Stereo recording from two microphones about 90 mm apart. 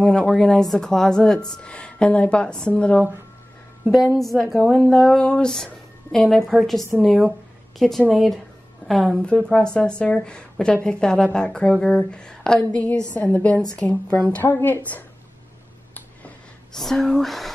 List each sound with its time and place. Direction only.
0.0 s a woman's voice: 10° left (ahead or behind)
3.8 s a woman's voice: 20° right (ahead or behind)
4.2 s a woman's voice: centre (ahead or behind)
9.2 s a woman's voice: 10° left (ahead or behind)
16.7 s speech: 5° left (ahead or behind)